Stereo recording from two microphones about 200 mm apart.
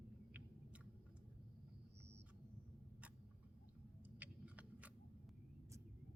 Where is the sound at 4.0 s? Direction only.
10° right (ahead or behind).